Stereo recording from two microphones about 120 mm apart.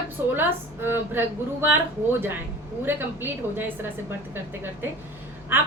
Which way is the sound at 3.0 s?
15° right (ahead or behind).